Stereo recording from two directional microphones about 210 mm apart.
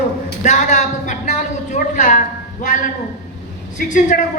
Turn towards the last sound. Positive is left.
turn(degrees=40)  # may be behind; listen again after turning